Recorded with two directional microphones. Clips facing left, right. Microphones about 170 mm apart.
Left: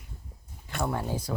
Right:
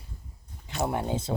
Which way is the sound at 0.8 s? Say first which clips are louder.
Right 2 dB; 20° right (ahead or behind).